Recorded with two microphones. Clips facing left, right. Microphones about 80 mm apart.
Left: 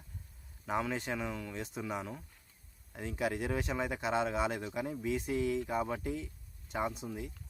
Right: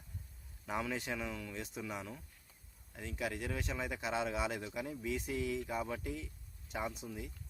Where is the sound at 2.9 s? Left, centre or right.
Centre.